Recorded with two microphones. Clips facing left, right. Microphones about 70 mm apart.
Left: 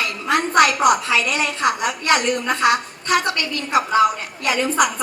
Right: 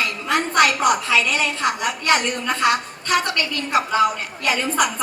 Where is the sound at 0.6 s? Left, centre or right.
Right.